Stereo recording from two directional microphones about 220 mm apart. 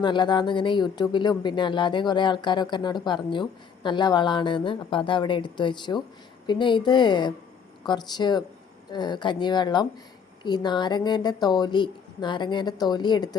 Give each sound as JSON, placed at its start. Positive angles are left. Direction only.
{"t": 0.0, "sound": "speech", "side_deg": 20}